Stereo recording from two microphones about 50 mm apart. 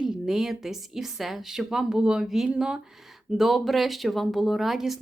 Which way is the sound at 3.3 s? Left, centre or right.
Centre.